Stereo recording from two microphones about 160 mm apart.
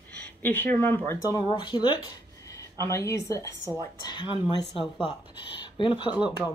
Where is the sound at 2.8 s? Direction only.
20° left (ahead or behind).